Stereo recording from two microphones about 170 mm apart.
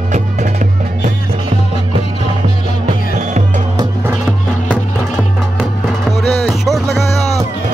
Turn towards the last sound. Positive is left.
turn(degrees=0)  # may be behind; listen again after turning